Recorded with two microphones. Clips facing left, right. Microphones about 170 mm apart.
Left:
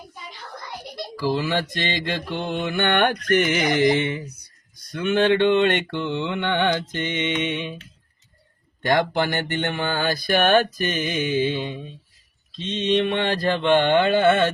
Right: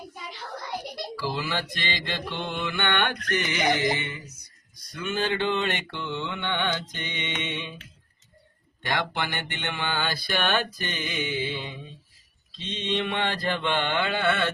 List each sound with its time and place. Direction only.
1.3 s mantra: 40° left (ahead or behind)
8.8 s mantra: 40° left (ahead or behind)
13.0 s mantra: 50° left (ahead or behind)